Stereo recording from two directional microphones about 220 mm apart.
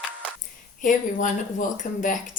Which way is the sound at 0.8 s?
35° left (ahead or behind).